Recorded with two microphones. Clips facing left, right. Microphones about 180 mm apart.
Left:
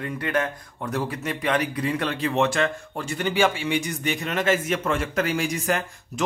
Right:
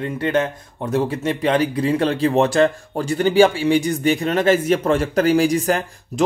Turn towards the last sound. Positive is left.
turn(degrees=-35)  # may be behind; listen again after turning